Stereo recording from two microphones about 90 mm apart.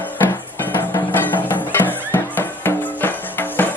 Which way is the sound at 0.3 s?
30° left (ahead or behind).